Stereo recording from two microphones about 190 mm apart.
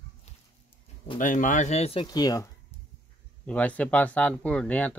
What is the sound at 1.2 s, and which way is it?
Speech, 45° left (ahead or behind).